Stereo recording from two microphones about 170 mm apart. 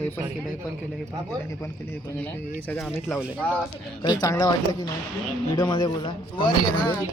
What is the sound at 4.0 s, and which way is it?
A man's voice, 25° left (ahead or behind).